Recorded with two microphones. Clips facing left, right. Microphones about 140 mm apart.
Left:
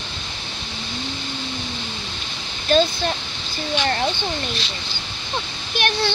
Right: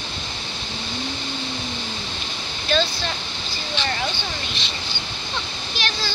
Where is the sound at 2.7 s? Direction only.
45° left (ahead or behind).